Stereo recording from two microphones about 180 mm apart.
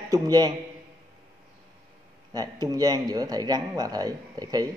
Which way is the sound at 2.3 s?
20° right (ahead or behind).